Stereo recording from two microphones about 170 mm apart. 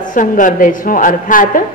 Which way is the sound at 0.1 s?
50° left (ahead or behind).